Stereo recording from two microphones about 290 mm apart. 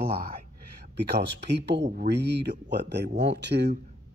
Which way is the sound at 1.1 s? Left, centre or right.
Right.